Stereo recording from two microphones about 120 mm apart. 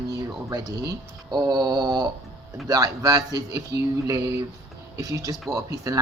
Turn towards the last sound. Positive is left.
turn(degrees=-30)  # may be behind; listen again after turning